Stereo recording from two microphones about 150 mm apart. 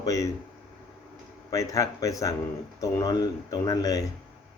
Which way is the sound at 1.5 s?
20° left (ahead or behind).